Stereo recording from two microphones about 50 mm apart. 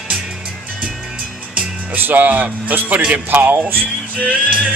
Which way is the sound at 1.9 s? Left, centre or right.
Right.